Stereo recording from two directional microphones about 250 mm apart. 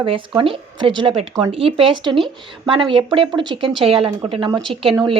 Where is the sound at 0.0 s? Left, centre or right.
Right.